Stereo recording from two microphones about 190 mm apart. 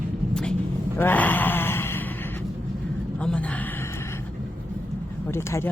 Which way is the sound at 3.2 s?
5° left (ahead or behind).